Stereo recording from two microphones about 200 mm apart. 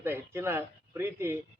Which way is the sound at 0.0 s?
10° right (ahead or behind).